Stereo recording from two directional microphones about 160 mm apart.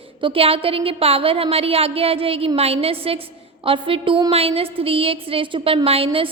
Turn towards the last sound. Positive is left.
turn(degrees=-35)  # may be behind; listen again after turning